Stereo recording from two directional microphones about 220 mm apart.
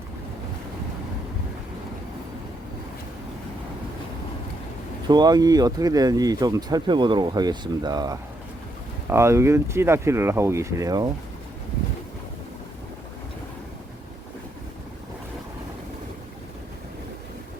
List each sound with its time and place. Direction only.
5.0 s speech: 20° right (ahead or behind)